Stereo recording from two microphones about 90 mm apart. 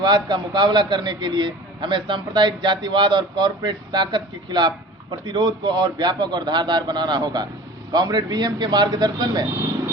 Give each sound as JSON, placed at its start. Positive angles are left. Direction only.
{"t": 0.0, "sound": "a man's voice", "side_deg": -55}